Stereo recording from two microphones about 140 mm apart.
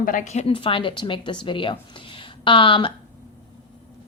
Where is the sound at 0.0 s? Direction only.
70° left (ahead or behind); by 0.5 s 55° left (ahead or behind).